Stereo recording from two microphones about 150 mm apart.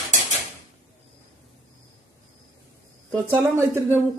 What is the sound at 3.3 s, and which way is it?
Speech, 20° right (ahead or behind).